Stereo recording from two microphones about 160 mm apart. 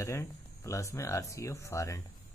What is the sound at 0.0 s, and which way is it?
Speech, 20° left (ahead or behind).